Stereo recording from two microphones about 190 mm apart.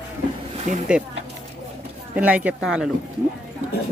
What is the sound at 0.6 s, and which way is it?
Speech, 35° right (ahead or behind).